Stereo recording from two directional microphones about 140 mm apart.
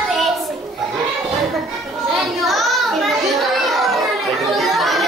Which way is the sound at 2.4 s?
Centre (ahead or behind).